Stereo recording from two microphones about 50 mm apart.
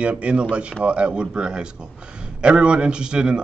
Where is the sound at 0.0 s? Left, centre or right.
Right.